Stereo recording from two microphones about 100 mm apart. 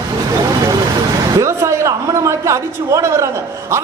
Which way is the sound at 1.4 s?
30° right (ahead or behind).